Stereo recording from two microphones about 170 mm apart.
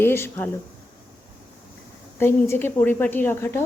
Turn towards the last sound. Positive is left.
turn(degrees=10)  # may be behind; listen again after turning